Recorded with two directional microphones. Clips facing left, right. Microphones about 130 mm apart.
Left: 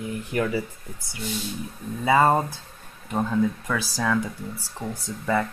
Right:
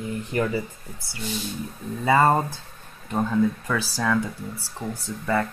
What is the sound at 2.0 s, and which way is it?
Speech, 10° left (ahead or behind).